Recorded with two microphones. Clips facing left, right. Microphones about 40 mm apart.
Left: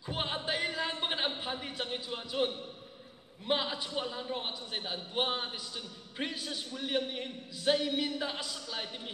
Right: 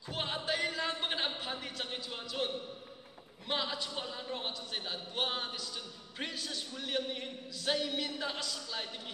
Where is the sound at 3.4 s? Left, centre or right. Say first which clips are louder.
Left 3 dB; centre.